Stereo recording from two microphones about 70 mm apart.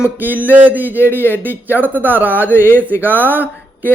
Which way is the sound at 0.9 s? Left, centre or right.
Left.